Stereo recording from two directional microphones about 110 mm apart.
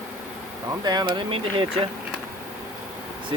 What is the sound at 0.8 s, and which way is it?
Speech, 40° right (ahead or behind).